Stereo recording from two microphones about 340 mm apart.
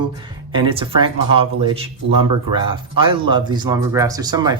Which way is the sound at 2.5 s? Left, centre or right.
Centre.